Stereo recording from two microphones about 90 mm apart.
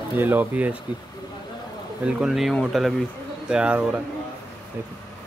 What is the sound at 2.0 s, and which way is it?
Speech, 5° right (ahead or behind).